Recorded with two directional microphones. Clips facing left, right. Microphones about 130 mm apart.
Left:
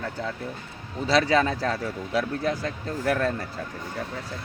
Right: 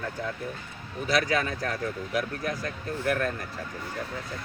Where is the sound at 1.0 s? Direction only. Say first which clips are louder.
Left 5 dB; 30° left (ahead or behind).